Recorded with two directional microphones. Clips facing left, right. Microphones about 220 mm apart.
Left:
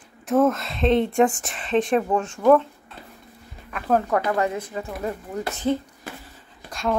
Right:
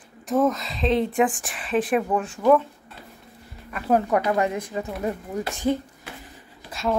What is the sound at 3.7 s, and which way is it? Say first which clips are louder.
Speech: right 1 dB; 10° right (ahead or behind).